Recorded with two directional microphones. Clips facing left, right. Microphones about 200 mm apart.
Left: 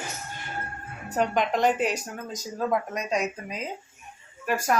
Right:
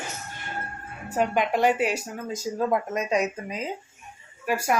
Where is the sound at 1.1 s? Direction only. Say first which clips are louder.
Right 1 dB; 5° right (ahead or behind).